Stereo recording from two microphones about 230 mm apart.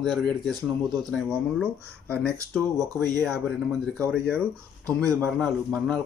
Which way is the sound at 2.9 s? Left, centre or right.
Centre.